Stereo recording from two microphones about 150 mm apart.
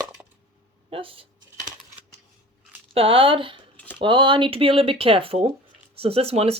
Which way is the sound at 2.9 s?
40° right (ahead or behind).